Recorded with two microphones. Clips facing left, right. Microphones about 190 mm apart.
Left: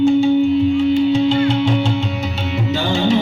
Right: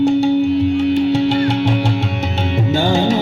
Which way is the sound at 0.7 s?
65° right (ahead or behind).